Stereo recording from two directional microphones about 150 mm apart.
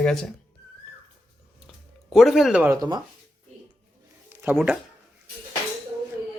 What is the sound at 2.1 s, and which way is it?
Speech, centre (ahead or behind).